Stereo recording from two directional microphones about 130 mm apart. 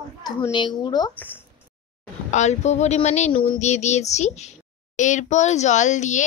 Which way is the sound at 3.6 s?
60° left (ahead or behind).